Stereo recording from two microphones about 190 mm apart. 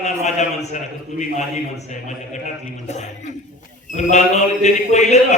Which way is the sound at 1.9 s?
40° left (ahead or behind).